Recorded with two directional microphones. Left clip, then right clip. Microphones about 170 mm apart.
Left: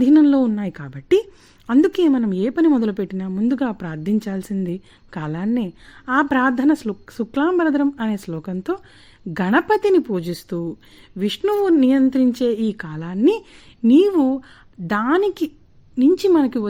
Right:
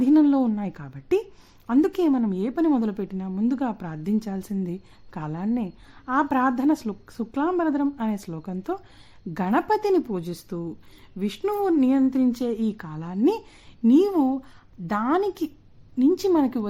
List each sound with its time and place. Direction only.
0.0 s a woman's voice: 15° left (ahead or behind)
10.2 s a woman's voice: 30° left (ahead or behind)